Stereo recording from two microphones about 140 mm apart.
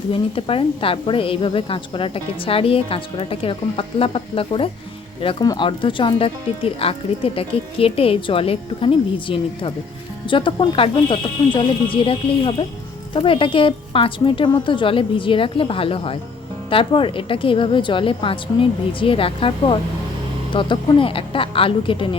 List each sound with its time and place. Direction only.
0.1 s a woman's voice: 40° left (ahead or behind)